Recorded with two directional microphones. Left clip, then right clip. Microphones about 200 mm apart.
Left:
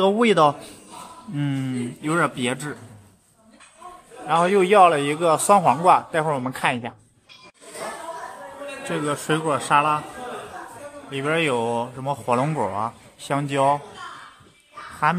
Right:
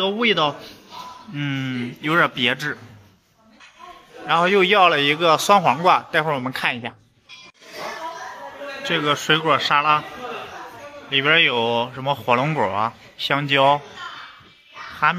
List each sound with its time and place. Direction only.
0.0 s a man's voice: 35° left (ahead or behind)
1.3 s speech: 20° left (ahead or behind)
1.6 s a man's voice: 5° left (ahead or behind)
4.3 s a man's voice: centre (ahead or behind)
8.8 s a man's voice: centre (ahead or behind)
11.1 s a man's voice: centre (ahead or behind)
15.1 s speech: 10° left (ahead or behind)